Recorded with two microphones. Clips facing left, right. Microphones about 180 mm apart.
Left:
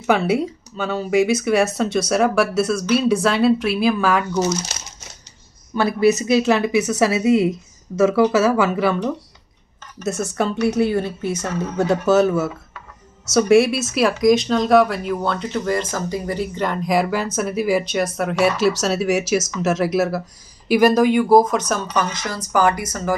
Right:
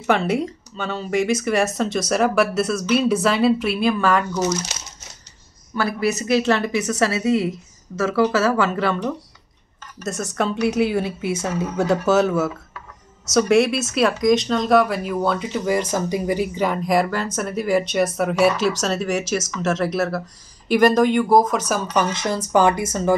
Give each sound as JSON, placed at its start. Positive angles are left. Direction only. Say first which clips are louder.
{"t": 0.0, "sound": "speech", "louder": "left 2 dB", "side_deg": 5}
{"t": 5.8, "sound": "speech", "louder": "left 5 dB", "side_deg": 20}
{"t": 10.3, "sound": "speech", "louder": "even", "side_deg": 0}
{"t": 21.9, "sound": "speech", "louder": "right 2 dB", "side_deg": -25}